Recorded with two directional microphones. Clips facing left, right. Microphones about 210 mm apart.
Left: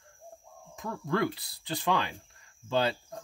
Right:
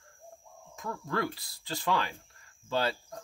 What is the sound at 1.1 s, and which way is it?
Speech, 20° left (ahead or behind).